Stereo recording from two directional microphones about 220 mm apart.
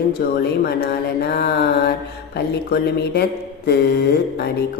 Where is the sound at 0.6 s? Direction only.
45° left (ahead or behind).